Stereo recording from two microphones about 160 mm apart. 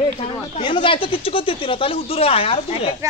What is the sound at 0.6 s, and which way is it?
Speech, 30° left (ahead or behind).